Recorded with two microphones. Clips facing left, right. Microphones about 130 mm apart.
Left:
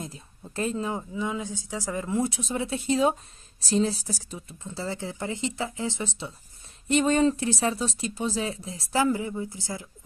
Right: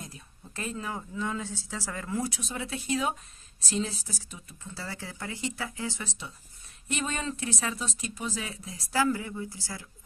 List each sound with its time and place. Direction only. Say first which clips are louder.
0.0 s speech: left 6 dB; 30° left (ahead or behind)
4.6 s speech: left 7 dB; 25° left (ahead or behind)